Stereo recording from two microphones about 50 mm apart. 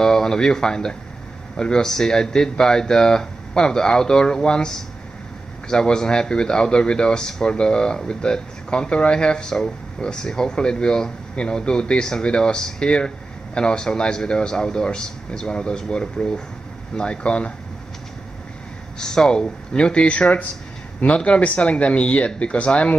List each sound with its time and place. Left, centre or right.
0.0 s speech: centre
18.9 s speech: centre